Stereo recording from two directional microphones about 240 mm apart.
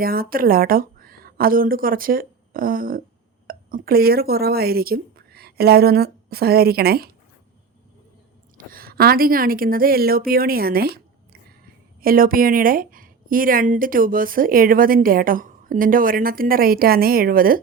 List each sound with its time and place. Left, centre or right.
0.0 s speech: right
8.5 s a woman's voice: right